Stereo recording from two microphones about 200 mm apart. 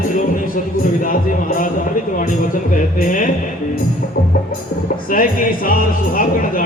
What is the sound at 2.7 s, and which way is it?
Speech, 40° left (ahead or behind).